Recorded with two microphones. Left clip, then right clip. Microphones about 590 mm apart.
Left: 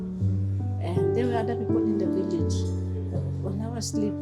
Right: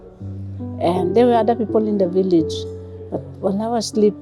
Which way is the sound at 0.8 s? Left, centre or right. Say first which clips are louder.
Right 11 dB; right.